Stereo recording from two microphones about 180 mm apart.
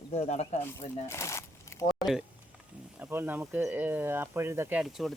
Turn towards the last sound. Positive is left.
turn(degrees=0)  # may be behind; listen again after turning